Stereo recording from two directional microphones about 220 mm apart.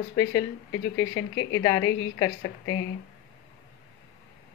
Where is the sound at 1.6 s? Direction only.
15° left (ahead or behind).